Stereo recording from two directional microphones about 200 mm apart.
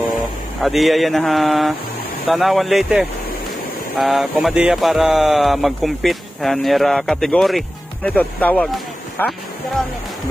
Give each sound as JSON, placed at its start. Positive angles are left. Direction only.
{"t": 0.6, "sound": "speech", "side_deg": 0}